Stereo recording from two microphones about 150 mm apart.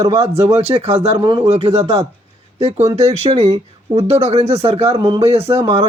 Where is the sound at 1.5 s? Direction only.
45° right (ahead or behind).